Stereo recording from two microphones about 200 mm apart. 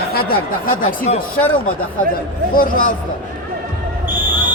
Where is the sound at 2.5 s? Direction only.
45° left (ahead or behind).